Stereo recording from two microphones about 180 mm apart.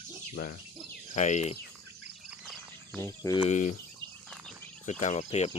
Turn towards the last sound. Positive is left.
turn(degrees=35)  # may be behind; listen again after turning